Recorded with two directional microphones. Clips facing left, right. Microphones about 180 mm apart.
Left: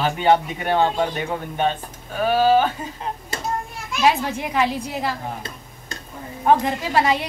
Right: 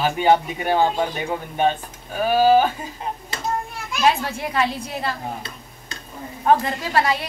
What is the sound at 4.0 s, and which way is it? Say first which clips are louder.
A woman's voice: left 1 dB; 15° left (ahead or behind).